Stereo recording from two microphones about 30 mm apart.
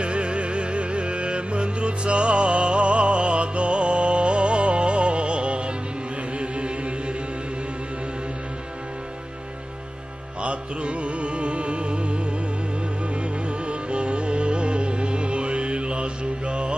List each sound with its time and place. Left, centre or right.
0.0 s music: right
10.4 s music: right
13.5 s music: right